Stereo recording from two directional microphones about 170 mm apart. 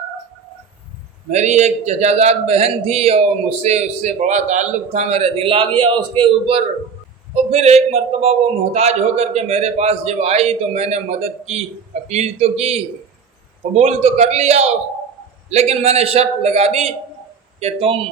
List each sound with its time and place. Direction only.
1.3 s a man's voice: 40° right (ahead or behind)